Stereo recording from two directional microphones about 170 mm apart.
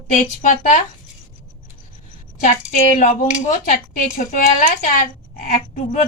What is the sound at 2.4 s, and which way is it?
Speech, 50° left (ahead or behind).